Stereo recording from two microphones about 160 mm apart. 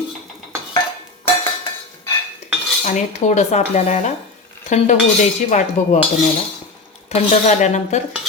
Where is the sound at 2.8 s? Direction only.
45° left (ahead or behind).